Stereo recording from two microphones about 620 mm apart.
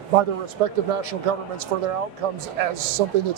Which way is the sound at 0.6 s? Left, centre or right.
Right.